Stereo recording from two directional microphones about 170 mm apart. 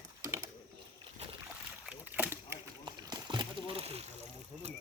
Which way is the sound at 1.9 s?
10° right (ahead or behind).